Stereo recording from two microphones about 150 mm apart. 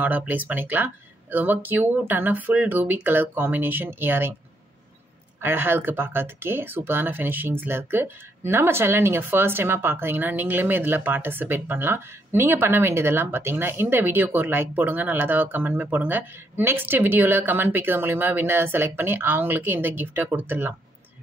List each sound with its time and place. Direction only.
0.0 s speech: 10° right (ahead or behind)
5.4 s speech: 15° right (ahead or behind)